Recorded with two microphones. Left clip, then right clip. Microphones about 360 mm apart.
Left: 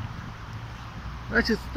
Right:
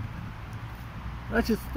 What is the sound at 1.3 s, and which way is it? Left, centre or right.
Speech, centre.